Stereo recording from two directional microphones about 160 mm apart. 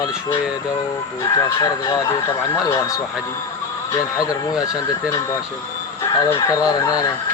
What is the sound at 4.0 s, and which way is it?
Speech, 20° left (ahead or behind).